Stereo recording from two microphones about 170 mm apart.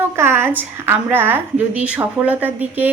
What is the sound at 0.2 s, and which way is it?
A woman's voice, 15° right (ahead or behind).